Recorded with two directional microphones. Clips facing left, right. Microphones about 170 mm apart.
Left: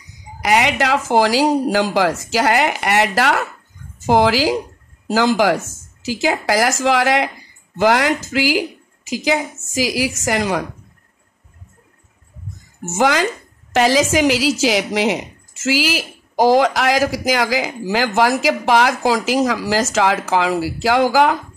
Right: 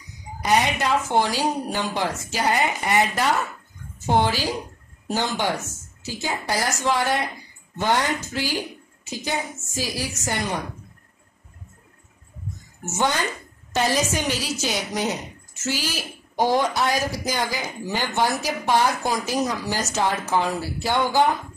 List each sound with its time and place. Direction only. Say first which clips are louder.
0.4 s speech: left 4 dB; 90° left
12.9 s speech: left 7 dB; 90° left